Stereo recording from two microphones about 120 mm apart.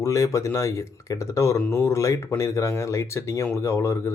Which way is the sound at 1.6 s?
10° left (ahead or behind).